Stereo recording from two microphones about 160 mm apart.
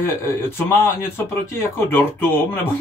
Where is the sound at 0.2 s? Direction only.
15° left (ahead or behind).